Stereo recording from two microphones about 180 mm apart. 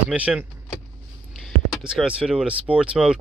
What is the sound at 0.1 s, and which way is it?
Speech, 10° right (ahead or behind).